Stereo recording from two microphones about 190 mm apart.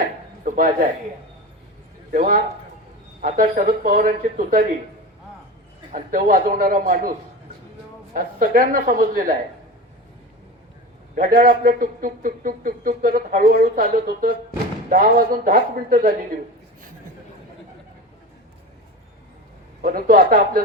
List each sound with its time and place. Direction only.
0.0 s a sound: 45° right (ahead or behind)
2.1 s a man's voice: 45° right (ahead or behind)
5.9 s a man's voice: 45° right (ahead or behind)
8.1 s a man's voice: 45° right (ahead or behind)
11.1 s a man's voice: 50° right (ahead or behind)
19.8 s a man's voice: 45° right (ahead or behind)